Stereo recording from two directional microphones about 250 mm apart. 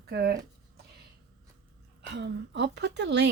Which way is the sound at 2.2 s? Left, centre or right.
Right.